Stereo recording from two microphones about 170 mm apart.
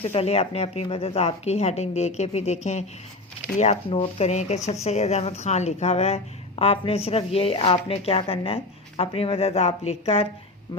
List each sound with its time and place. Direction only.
0.0 s a woman's voice: 35° left (ahead or behind)